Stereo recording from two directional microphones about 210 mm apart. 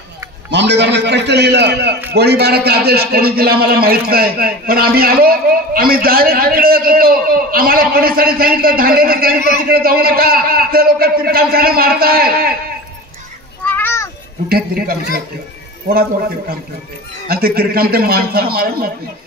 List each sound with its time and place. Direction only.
0.5 s a man's voice: 55° right (ahead or behind)
13.7 s children playing: 10° left (ahead or behind)
14.5 s a sound: 45° right (ahead or behind)
15.9 s a man's voice: 45° right (ahead or behind)